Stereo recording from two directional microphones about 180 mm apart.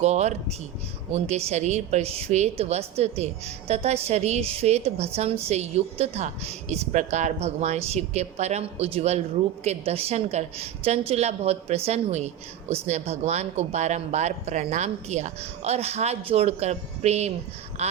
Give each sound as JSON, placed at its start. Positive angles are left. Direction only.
{"t": 0.0, "sound": "a woman's voice", "side_deg": -35}